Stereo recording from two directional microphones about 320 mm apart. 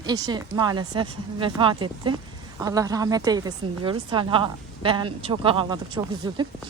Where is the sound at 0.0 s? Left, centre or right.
Centre.